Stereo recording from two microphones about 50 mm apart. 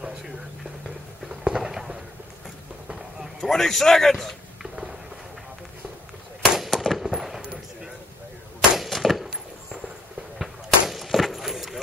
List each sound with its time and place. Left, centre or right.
1.3 s clip-clop: centre
3.3 s a man's voice: centre
6.5 s fireworks: centre
7.0 s a sound: centre